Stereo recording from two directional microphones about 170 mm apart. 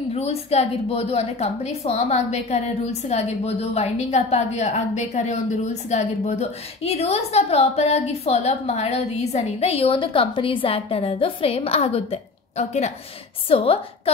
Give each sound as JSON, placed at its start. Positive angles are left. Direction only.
{"t": 0.1, "sound": "a woman's voice", "side_deg": 35}